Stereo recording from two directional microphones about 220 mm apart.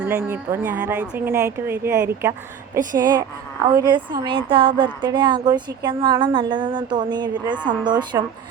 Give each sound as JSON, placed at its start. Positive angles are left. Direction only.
{"t": 0.0, "sound": "a woman's voice", "side_deg": -10}